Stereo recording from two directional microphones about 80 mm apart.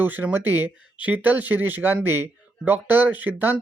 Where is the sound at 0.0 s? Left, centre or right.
Right.